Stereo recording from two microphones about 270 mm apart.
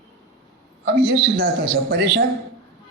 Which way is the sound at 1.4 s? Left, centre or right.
Right.